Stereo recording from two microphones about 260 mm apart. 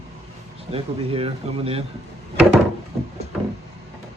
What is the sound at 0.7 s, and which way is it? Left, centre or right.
Speech, right.